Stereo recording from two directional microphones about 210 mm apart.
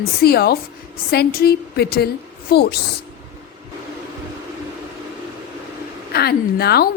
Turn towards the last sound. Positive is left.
turn(degrees=50)  # may be behind; listen again after turning